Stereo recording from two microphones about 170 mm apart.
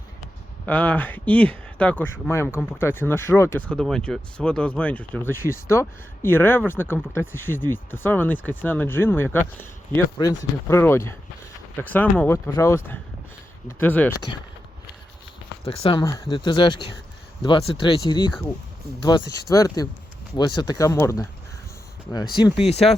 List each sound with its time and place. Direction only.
0.6 s speech: 10° left (ahead or behind)
15.6 s speech: 30° left (ahead or behind)
22.4 s speech: 30° left (ahead or behind)